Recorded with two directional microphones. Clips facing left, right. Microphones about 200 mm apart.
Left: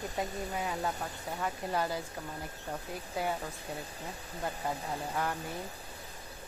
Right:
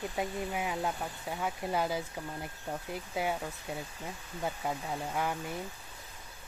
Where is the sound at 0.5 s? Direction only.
10° right (ahead or behind).